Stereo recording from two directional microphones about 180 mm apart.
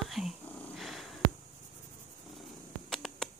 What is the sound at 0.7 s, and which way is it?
Purr, centre (ahead or behind).